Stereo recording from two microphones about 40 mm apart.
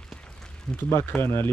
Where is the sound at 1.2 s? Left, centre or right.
Left.